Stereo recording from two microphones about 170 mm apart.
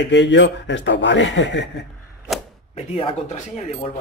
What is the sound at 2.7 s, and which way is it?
Speech, 35° left (ahead or behind).